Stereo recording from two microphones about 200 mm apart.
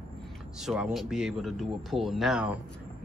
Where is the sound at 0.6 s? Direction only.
Centre (ahead or behind).